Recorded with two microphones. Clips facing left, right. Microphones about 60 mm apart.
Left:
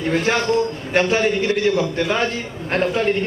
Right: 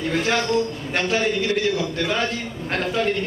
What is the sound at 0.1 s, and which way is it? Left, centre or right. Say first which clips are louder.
A woman's voice: left 3 dB; left.